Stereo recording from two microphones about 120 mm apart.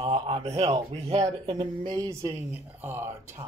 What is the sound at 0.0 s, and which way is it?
Speech, 60° right (ahead or behind).